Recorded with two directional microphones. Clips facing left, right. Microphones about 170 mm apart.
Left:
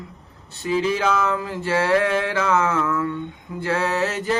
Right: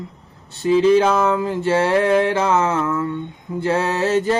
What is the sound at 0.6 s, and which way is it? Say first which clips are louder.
Mantra: right 7 dB; 25° right (ahead or behind).